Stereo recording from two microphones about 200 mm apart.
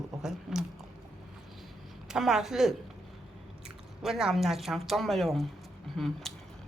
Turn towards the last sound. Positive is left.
turn(degrees=0)  # may be behind; listen again after turning